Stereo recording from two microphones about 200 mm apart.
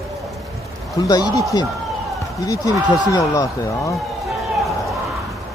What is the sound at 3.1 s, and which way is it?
Speech, 15° left (ahead or behind).